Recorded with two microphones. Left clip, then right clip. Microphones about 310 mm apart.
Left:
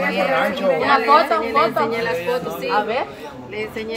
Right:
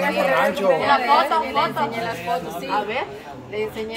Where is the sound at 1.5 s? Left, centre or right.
Left.